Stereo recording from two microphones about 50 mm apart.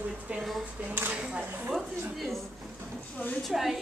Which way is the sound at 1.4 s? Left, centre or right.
Right.